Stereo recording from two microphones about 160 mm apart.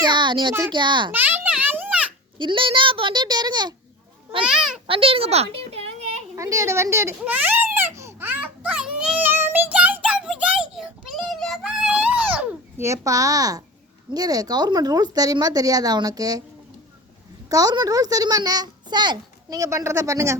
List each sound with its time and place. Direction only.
0.1 s a sound: 30° right (ahead or behind)
0.7 s a child's voice: 30° right (ahead or behind)
1.1 s a sound: 10° right (ahead or behind)
2.4 s speech: 30° right (ahead or behind)
4.4 s a child's voice: 5° right (ahead or behind)
4.9 s speech: 35° right (ahead or behind)
6.3 s a sound: 20° right (ahead or behind)
14.1 s a child's voice: 25° right (ahead or behind)
17.5 s a child's voice: 25° right (ahead or behind)